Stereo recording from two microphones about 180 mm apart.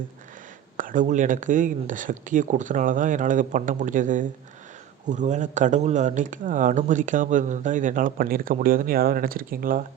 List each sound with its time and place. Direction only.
0.8 s speech: 45° right (ahead or behind)